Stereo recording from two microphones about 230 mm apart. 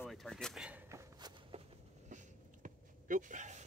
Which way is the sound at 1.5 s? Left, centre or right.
Right.